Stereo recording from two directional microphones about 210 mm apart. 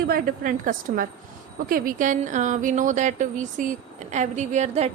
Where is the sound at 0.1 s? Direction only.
45° right (ahead or behind).